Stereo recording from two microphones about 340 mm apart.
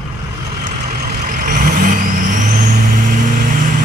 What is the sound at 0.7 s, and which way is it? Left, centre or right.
Vehicle, right.